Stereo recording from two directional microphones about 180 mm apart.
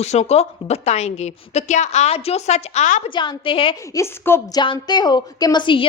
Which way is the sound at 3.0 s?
25° left (ahead or behind).